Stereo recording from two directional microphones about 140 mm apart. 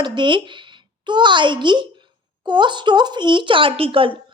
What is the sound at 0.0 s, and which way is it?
A child's voice, 35° right (ahead or behind).